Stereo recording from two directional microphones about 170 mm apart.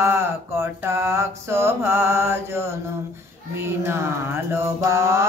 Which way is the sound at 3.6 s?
15° right (ahead or behind).